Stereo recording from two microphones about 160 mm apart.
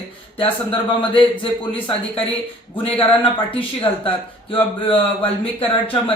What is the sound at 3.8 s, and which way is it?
Speech, 30° left (ahead or behind).